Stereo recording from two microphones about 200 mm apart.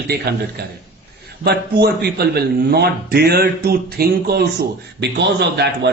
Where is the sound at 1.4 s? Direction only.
55° right (ahead or behind).